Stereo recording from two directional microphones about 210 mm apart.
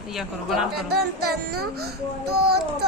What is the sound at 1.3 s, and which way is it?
A child's voice, 50° right (ahead or behind).